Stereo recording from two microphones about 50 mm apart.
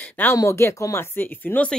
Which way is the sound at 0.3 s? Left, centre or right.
Left.